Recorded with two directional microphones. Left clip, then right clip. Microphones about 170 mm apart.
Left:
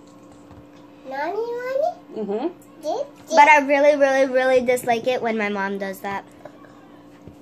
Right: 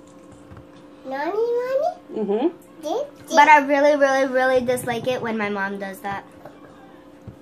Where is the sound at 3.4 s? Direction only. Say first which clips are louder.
Even; 45° left (ahead or behind).